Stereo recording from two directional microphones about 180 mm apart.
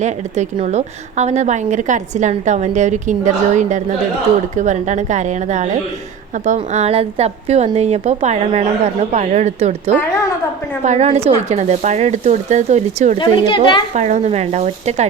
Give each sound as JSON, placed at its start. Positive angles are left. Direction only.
{"t": 0.0, "sound": "a woman's voice", "side_deg": -40}
{"t": 13.1, "sound": "a child's voice", "side_deg": 25}
{"t": 13.9, "sound": "a woman's voice", "side_deg": -40}